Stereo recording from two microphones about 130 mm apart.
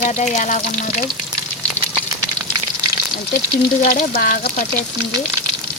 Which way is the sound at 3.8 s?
90° left.